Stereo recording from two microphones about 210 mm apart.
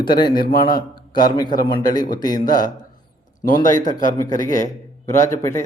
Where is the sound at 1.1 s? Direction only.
20° left (ahead or behind).